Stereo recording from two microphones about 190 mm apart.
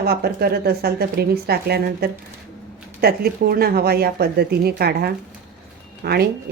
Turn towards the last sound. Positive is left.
turn(degrees=-55)  # may be behind; listen again after turning